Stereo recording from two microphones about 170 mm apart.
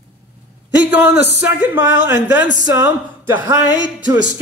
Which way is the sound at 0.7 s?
10° right (ahead or behind).